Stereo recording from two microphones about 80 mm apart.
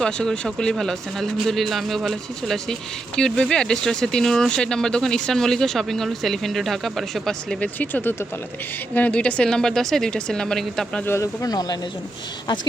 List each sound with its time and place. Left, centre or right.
0.0 s speech: centre
7.6 s speech: left; by 11.0 s centre
11.2 s speech: left